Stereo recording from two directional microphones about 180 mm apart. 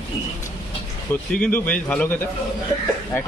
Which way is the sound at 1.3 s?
10° left (ahead or behind).